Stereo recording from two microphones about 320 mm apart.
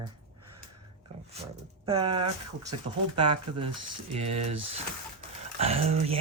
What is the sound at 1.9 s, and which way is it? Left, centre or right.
Speech, centre.